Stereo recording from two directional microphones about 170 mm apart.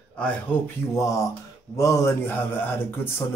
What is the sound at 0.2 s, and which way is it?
Speech, 10° left (ahead or behind).